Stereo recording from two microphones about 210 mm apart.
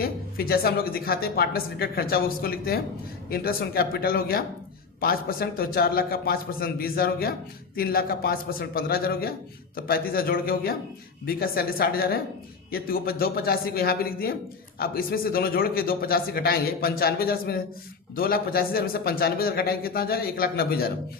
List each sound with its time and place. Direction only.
0.0 s a man's voice: 45° left (ahead or behind)